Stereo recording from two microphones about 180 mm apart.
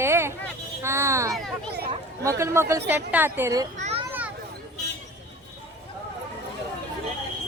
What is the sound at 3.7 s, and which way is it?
Children playing, 40° right (ahead or behind).